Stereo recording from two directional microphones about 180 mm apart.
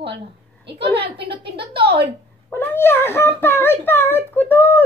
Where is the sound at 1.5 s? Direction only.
30° right (ahead or behind).